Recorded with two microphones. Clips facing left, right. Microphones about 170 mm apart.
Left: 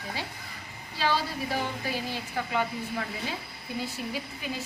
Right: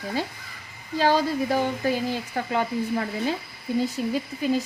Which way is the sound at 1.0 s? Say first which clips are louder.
Right 7 dB; 45° right (ahead or behind).